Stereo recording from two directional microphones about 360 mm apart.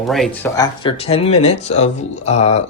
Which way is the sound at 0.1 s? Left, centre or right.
Centre.